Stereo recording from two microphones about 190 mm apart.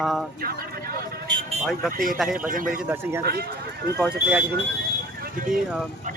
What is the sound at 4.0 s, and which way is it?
Speech, 5° right (ahead or behind).